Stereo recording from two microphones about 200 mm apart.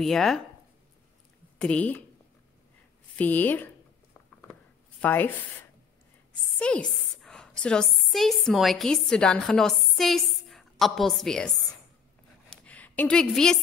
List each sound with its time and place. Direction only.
0.0 s speech: centre (ahead or behind)
1.6 s speech: 5° left (ahead or behind)
3.2 s speech: 10° left (ahead or behind)
5.0 s speech: 10° left (ahead or behind)
6.5 s a woman's voice: 5° left (ahead or behind)
12.4 s a sound: 5° left (ahead or behind)